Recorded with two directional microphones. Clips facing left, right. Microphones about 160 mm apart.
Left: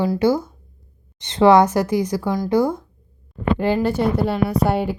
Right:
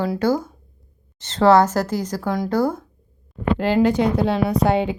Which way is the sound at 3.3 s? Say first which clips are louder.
Even; centre (ahead or behind).